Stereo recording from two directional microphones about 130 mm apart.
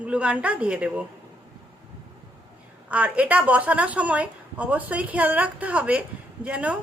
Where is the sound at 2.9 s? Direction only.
10° right (ahead or behind).